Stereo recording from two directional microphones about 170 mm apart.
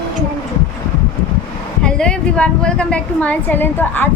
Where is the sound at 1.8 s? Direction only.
5° left (ahead or behind).